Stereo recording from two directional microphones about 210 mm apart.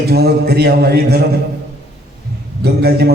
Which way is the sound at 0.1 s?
50° right (ahead or behind).